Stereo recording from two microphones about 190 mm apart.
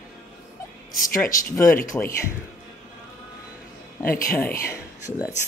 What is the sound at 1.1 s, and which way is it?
Speech, 15° left (ahead or behind).